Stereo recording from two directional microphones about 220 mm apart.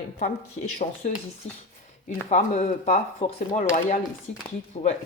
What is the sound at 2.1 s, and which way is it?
Speech, 30° left (ahead or behind).